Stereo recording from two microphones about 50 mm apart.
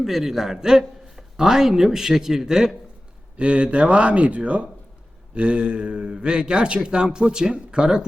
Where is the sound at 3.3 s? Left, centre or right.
Right.